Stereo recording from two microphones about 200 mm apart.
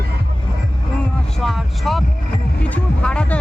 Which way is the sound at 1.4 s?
Centre (ahead or behind).